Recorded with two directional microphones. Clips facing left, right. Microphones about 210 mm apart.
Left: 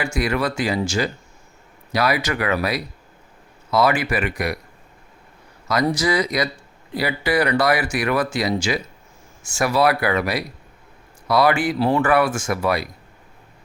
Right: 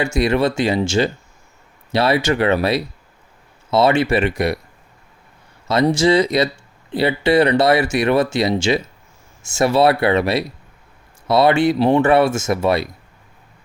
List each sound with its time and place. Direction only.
0.0 s speech: 25° right (ahead or behind)
5.6 s speech: 25° right (ahead or behind)